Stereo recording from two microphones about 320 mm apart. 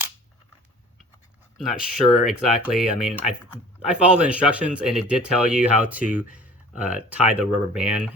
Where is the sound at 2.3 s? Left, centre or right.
Centre.